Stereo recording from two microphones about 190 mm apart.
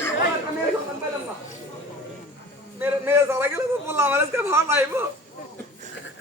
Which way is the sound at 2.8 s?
10° right (ahead or behind).